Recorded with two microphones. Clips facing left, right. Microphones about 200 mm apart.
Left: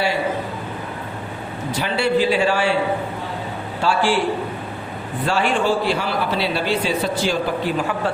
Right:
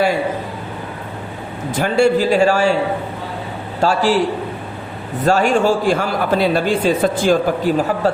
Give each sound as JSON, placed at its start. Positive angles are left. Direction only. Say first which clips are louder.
{"t": 1.7, "sound": "a man's voice", "louder": "right 5 dB", "side_deg": -45}
{"t": 3.8, "sound": "a man's voice", "louder": "right 4 dB", "side_deg": -40}
{"t": 5.2, "sound": "a man's voice", "louder": "right 5 dB", "side_deg": -45}